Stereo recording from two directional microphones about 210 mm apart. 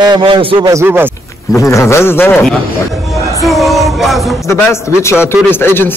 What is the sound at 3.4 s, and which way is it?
Music, centre (ahead or behind).